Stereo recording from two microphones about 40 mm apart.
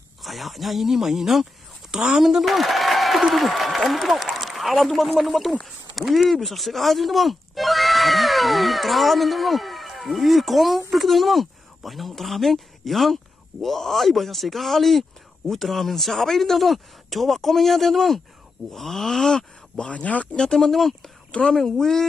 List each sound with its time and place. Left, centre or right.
0.2 s speech: centre
1.9 s a woman's voice: centre
2.1 s a man's voice: centre
19.9 s speech: left
20.3 s speech: centre
21.3 s a woman's voice: left